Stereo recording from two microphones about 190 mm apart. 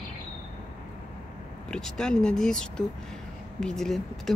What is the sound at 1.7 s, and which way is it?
Speech, 5° left (ahead or behind).